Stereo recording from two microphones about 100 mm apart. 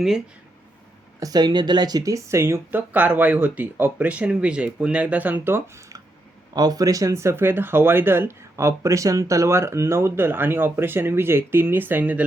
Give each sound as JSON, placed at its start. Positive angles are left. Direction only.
{"t": 1.2, "sound": "speech", "side_deg": -40}
{"t": 6.5, "sound": "speech", "side_deg": -40}